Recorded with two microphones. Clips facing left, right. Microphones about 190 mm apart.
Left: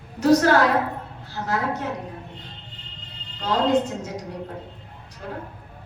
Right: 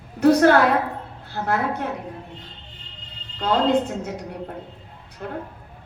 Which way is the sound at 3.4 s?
60° right (ahead or behind).